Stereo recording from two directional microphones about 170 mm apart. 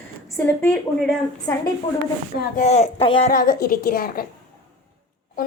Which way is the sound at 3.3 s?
60° left (ahead or behind).